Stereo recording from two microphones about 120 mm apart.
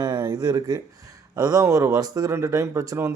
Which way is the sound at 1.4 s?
30° right (ahead or behind).